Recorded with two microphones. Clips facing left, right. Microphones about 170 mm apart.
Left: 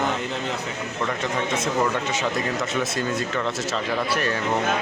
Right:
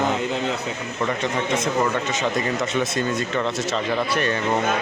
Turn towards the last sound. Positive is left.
turn(degrees=5)  # may be behind; listen again after turning